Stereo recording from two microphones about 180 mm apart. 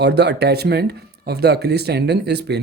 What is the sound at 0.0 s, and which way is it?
Speech, 70° right (ahead or behind).